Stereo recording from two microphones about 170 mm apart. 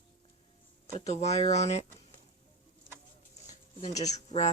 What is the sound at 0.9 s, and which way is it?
Speech, 40° left (ahead or behind).